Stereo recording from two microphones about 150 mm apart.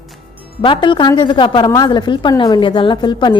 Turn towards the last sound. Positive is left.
turn(degrees=30)  # may be behind; listen again after turning